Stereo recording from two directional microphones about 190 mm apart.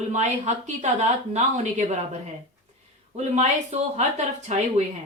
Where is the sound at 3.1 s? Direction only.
35° right (ahead or behind).